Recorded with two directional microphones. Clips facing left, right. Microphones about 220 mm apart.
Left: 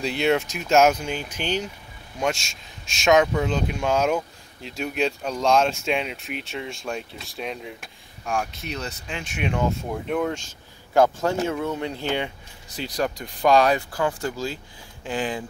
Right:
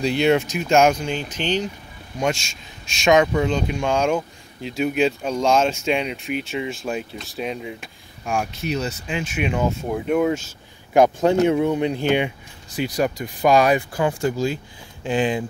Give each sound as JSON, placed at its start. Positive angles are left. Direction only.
{"t": 0.0, "sound": "speech", "side_deg": 0}
{"t": 10.9, "sound": "speech", "side_deg": -20}